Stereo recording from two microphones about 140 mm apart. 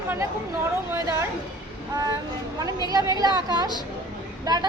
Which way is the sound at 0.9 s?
20° right (ahead or behind).